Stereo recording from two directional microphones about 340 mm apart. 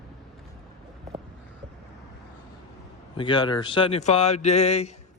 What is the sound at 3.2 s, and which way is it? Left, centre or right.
Speech, centre.